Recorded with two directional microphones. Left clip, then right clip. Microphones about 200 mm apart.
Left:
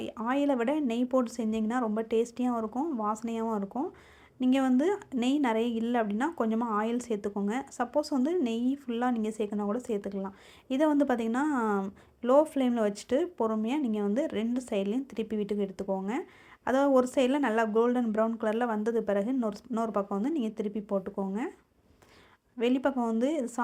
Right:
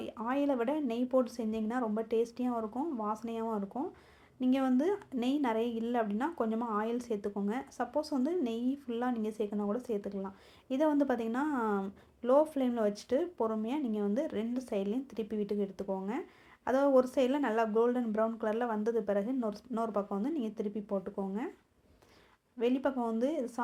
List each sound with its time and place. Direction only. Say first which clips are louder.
0.0 s a woman's voice: left 4 dB; 30° left (ahead or behind)
22.5 s a woman's voice: left 3 dB; 35° left (ahead or behind)